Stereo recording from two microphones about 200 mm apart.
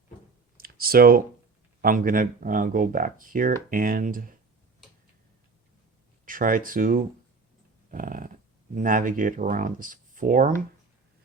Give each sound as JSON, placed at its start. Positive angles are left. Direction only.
{"t": 0.5, "sound": "a sound", "side_deg": -50}
{"t": 1.8, "sound": "speech", "side_deg": -45}
{"t": 6.2, "sound": "speech", "side_deg": -45}
{"t": 7.9, "sound": "dog", "side_deg": -45}
{"t": 8.7, "sound": "speech", "side_deg": -40}